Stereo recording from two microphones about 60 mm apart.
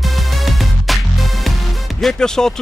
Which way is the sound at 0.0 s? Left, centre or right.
Centre.